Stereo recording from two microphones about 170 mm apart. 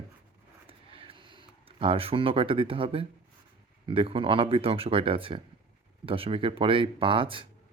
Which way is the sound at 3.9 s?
30° right (ahead or behind).